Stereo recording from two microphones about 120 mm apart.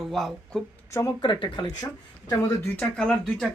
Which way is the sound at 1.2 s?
40° left (ahead or behind).